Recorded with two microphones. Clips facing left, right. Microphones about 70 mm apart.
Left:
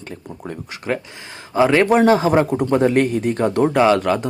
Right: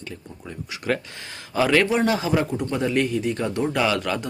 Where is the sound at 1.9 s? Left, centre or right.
Left.